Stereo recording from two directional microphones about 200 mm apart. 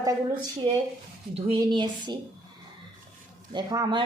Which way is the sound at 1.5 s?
25° right (ahead or behind).